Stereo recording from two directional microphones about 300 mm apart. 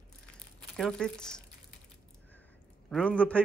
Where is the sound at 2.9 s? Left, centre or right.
Centre.